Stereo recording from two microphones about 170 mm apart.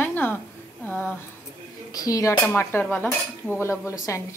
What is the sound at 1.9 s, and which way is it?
A woman's voice, 20° left (ahead or behind).